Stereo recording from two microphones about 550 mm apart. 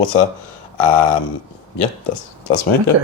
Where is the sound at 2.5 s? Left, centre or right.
Left.